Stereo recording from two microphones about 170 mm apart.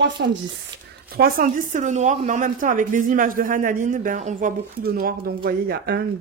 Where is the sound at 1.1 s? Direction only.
60° right (ahead or behind).